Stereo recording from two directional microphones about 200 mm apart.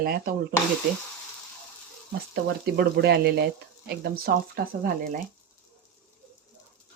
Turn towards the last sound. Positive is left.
turn(degrees=-45)  # may be behind; listen again after turning